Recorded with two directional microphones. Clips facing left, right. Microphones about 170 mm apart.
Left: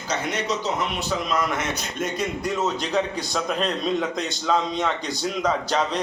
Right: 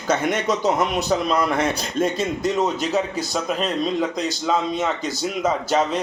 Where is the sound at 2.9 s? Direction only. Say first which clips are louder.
Right 2 dB; 5° right (ahead or behind).